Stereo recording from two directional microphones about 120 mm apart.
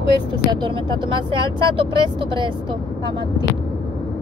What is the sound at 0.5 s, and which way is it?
Speech, 40° right (ahead or behind).